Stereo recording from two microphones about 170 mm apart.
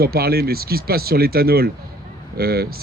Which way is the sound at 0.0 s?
65° right (ahead or behind).